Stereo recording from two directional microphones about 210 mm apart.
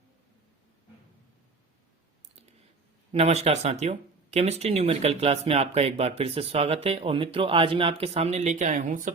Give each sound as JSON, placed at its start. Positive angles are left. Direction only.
{"t": 3.1, "sound": "speech", "side_deg": -30}